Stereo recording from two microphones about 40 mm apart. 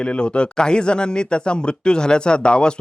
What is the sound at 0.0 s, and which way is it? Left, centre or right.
Speech, left.